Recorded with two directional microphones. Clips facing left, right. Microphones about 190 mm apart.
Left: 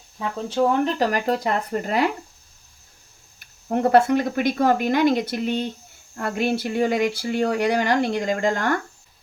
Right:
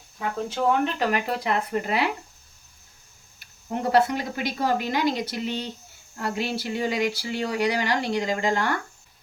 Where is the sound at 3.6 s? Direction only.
55° left (ahead or behind).